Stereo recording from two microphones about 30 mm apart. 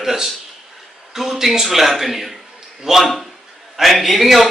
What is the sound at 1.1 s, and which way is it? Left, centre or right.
A man's voice, centre.